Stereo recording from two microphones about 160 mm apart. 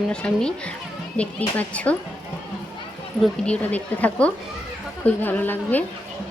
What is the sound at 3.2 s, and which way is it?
Speech, 5° left (ahead or behind).